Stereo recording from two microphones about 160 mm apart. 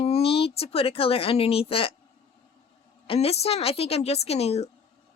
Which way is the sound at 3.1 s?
40° left (ahead or behind).